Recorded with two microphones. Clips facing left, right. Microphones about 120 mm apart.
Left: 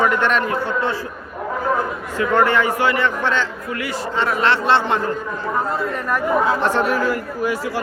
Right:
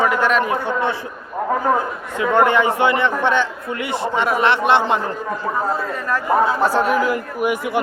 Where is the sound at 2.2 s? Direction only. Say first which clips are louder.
Right 1 dB; 20° right (ahead or behind).